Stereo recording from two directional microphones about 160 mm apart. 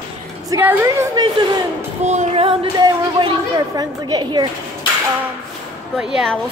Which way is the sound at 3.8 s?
25° right (ahead or behind).